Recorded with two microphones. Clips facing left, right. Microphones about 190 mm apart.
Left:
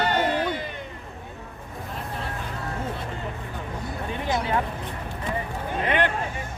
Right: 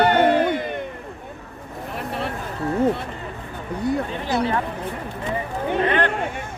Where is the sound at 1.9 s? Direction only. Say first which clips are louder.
Right 6 dB; 70° right (ahead or behind).